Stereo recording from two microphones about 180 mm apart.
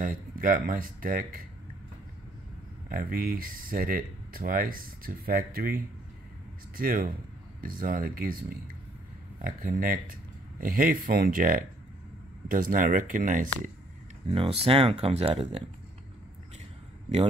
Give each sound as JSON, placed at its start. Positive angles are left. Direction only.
{"t": 0.0, "sound": "speech", "side_deg": -50}
{"t": 2.9, "sound": "speech", "side_deg": -50}
{"t": 14.2, "sound": "speech", "side_deg": -30}